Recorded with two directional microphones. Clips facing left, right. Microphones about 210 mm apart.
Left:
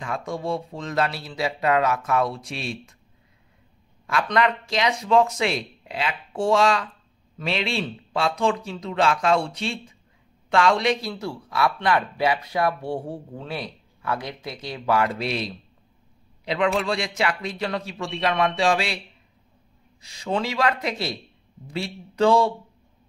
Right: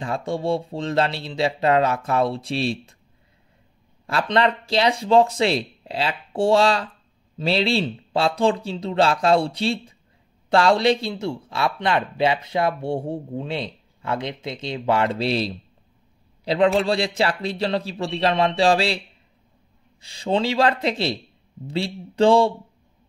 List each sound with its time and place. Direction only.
0.0 s speech: 30° right (ahead or behind)
4.1 s a man's voice: 30° right (ahead or behind)
20.0 s speech: 30° right (ahead or behind)